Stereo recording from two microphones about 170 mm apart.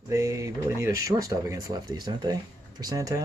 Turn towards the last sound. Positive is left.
turn(degrees=-20)  # may be behind; listen again after turning